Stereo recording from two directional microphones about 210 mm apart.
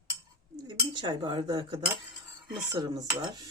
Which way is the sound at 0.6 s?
20° right (ahead or behind).